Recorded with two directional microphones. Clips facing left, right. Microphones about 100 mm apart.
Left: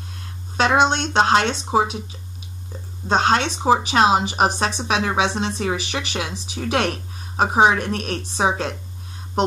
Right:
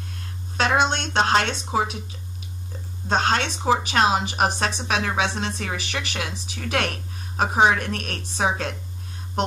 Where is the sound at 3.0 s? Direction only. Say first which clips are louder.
Left 4 dB; 25° left (ahead or behind).